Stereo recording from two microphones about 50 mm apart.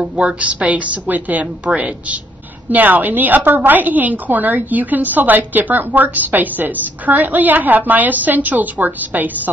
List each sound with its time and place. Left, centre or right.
0.2 s a woman's voice: right
2.7 s a woman's voice: right